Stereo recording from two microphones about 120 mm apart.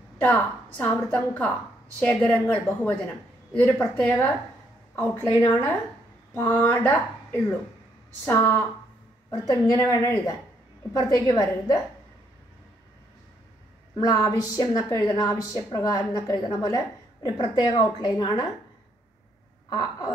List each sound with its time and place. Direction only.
0.2 s a woman's voice: 15° left (ahead or behind)
9.3 s a woman's voice: 25° left (ahead or behind)
13.9 s a woman's voice: 30° left (ahead or behind)
19.7 s a woman's voice: 35° left (ahead or behind)